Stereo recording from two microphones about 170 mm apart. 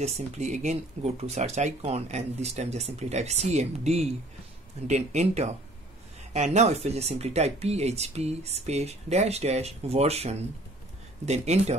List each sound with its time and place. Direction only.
0.0 s speech: 45° right (ahead or behind)